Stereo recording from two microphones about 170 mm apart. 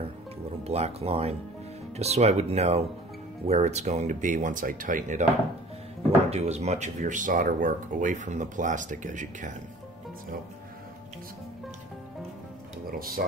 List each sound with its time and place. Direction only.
0.7 s speech: 35° right (ahead or behind)
6.3 s speech: 40° right (ahead or behind)
12.9 s speech: 60° right (ahead or behind)